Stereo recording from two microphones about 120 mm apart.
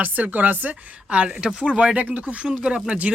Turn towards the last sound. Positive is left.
turn(degrees=-10)  # may be behind; listen again after turning